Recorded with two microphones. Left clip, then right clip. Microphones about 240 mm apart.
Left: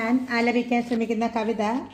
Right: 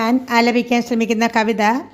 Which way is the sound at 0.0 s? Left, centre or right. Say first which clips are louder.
Right 8 dB; right.